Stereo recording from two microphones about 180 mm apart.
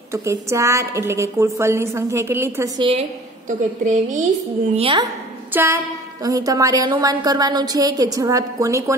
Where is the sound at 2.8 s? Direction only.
35° right (ahead or behind).